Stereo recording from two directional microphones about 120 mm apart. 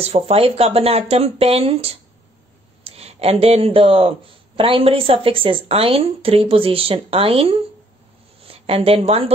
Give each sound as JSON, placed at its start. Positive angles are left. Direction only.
{"t": 0.0, "sound": "a woman's voice", "side_deg": -55}